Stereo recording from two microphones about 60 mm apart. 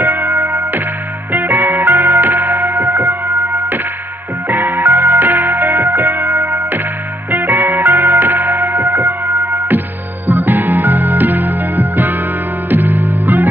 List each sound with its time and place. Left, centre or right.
0.0 s music: right
0.3 s music: right
1.3 s music: right
10.2 s music: right